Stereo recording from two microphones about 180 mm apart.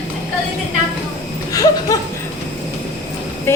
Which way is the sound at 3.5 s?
15° left (ahead or behind).